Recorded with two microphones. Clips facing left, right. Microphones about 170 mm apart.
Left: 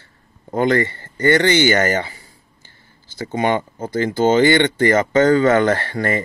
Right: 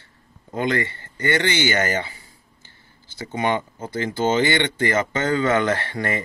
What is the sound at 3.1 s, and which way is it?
Speech, 35° left (ahead or behind).